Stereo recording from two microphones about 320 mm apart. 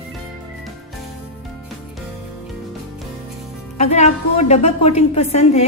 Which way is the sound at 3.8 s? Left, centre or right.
Centre.